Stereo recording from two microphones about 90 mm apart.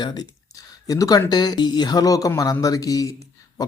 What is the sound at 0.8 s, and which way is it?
Speech, 40° left (ahead or behind).